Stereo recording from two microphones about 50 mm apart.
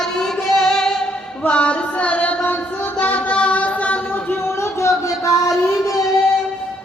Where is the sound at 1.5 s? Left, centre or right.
Left.